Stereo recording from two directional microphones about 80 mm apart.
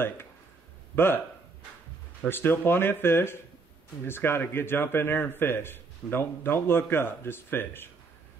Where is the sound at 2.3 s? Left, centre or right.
Left.